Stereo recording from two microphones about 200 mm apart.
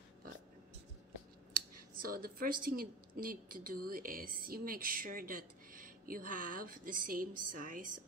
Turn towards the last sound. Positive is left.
turn(degrees=-40)  # may be behind; listen again after turning